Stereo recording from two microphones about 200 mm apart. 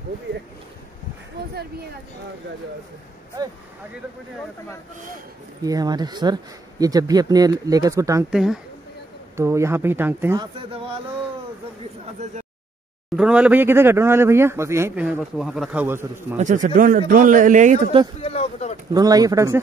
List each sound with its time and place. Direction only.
3.4 s speech: 20° right (ahead or behind)
5.6 s speech: 20° right (ahead or behind)
8.3 s speech: centre (ahead or behind)
9.4 s speech: 15° right (ahead or behind)
10.4 s speech: 25° right (ahead or behind)
11.8 s a sound: 35° right (ahead or behind)
13.1 s speech: 5° right (ahead or behind)
16.3 s speech: 40° right (ahead or behind)
18.2 s speech: 30° left (ahead or behind)
18.9 s speech: 20° right (ahead or behind)